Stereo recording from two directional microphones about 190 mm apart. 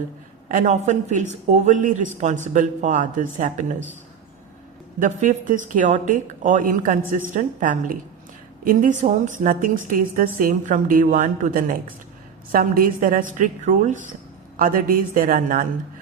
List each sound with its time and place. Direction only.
0.4 s speech: 40° right (ahead or behind)
4.9 s a woman's voice: 40° right (ahead or behind)